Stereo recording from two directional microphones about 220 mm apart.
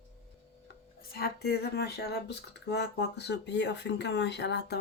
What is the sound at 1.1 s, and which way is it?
Speech, 45° left (ahead or behind).